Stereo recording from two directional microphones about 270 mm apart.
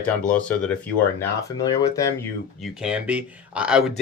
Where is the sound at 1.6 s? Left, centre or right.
Centre.